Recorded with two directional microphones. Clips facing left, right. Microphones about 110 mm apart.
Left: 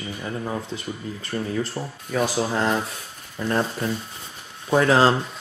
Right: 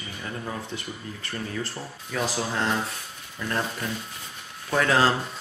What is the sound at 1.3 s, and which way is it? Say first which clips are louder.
Speech: left 6 dB; 25° left (ahead or behind).